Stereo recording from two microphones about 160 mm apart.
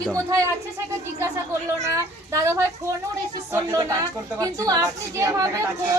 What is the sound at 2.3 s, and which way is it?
A woman's voice, 20° right (ahead or behind).